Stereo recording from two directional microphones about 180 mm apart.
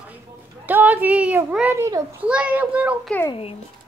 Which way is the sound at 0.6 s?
10° right (ahead or behind).